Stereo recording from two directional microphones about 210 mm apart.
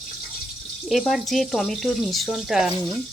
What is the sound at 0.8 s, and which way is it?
Speech, centre (ahead or behind).